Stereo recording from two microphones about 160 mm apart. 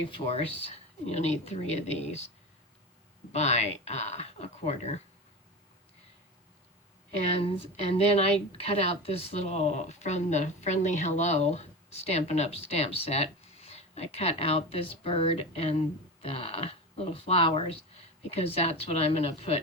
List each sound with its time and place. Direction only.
0.1 s speech: 40° left (ahead or behind)
3.3 s speech: 45° left (ahead or behind)
7.4 s a woman's voice: 35° left (ahead or behind)